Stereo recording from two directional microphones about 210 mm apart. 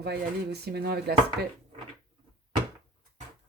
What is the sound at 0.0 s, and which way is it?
Speech, 50° right (ahead or behind).